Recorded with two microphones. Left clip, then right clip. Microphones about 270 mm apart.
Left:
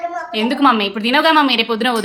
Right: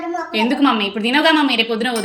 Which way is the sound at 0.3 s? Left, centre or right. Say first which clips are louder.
Left 3 dB; centre.